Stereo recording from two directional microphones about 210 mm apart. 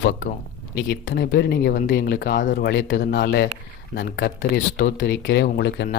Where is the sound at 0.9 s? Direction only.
50° left (ahead or behind).